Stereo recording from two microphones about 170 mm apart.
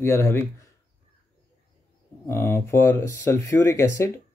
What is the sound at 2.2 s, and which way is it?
Speech, 15° left (ahead or behind).